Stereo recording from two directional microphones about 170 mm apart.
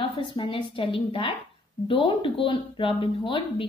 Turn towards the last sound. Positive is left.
turn(degrees=30)  # may be behind; listen again after turning